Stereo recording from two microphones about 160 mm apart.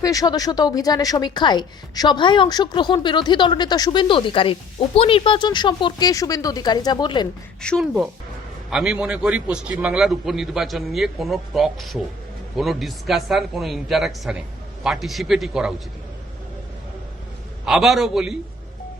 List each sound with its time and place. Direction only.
0.0 s a woman's voice: 20° left (ahead or behind)
7.6 s a man's voice: 5° left (ahead or behind)
17.7 s a man's voice: centre (ahead or behind)